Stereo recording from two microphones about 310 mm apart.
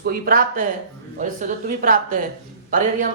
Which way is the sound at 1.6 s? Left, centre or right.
Right.